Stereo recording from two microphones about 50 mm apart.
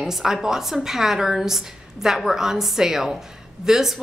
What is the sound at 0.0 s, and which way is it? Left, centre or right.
A woman's voice, centre.